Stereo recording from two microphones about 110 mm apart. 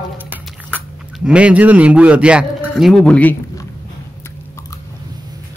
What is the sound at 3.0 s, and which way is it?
Speech, 10° left (ahead or behind).